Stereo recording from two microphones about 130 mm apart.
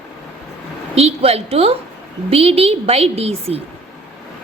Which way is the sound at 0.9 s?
50° right (ahead or behind).